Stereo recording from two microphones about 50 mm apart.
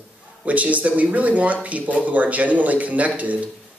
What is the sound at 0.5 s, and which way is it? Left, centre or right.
Speech, right.